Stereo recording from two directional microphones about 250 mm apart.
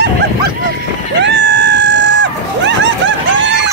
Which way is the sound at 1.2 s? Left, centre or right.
Right.